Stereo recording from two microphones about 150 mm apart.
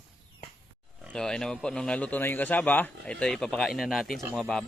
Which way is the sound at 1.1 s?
5° left (ahead or behind).